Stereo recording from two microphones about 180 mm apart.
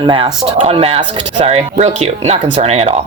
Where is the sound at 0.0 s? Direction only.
25° right (ahead or behind).